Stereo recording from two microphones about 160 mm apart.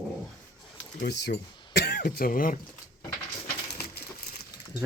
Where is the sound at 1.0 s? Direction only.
90° left; by 2.5 s 60° left (ahead or behind).